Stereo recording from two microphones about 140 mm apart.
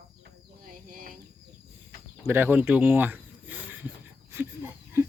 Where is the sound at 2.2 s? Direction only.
15° right (ahead or behind).